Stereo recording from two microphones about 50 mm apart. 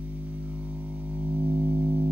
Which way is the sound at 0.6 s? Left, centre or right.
Right.